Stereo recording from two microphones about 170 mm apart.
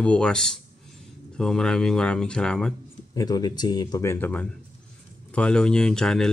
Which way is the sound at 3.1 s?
20° left (ahead or behind).